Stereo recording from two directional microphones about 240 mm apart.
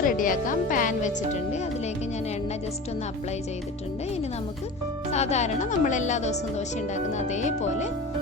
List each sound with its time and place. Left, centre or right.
0.0 s speech: left
5.1 s a woman's voice: left